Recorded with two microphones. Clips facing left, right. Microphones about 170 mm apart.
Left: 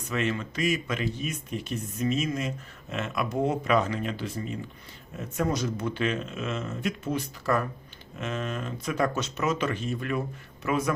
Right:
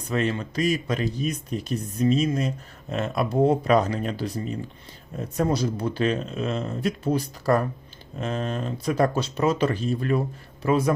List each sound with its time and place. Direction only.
0.0 s speech: 35° right (ahead or behind)